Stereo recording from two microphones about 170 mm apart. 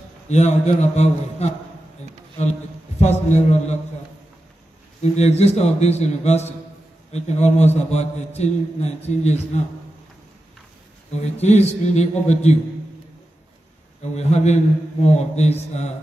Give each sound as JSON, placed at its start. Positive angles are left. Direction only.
{"t": 0.3, "sound": "a man's voice", "side_deg": 40}
{"t": 3.0, "sound": "a man's voice", "side_deg": 40}
{"t": 5.0, "sound": "a man's voice", "side_deg": 40}
{"t": 11.1, "sound": "a man's voice", "side_deg": 40}
{"t": 14.1, "sound": "a man's voice", "side_deg": 40}